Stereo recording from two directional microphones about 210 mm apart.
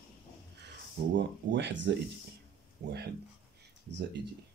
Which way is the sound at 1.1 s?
55° right (ahead or behind).